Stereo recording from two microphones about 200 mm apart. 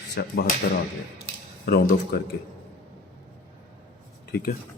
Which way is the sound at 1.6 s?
50° left (ahead or behind).